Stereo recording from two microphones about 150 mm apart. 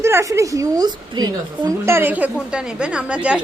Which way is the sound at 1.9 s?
15° right (ahead or behind).